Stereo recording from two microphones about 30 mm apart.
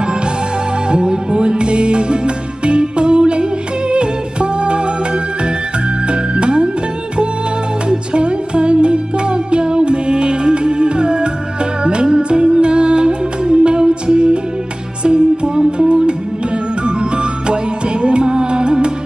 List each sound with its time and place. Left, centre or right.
0.8 s music: right
6.0 s music: right
7.9 s music: right